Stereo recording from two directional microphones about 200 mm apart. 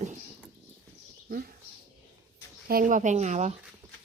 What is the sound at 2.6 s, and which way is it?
Speech, 45° right (ahead or behind).